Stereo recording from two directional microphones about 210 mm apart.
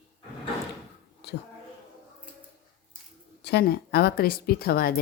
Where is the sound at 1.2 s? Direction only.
50° left (ahead or behind).